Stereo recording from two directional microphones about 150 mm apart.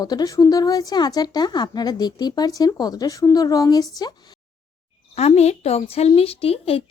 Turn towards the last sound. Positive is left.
turn(degrees=40)  # may be behind; listen again after turning